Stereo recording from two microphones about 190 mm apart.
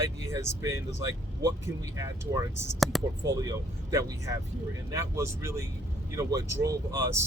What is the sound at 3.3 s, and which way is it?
Speech, 15° right (ahead or behind).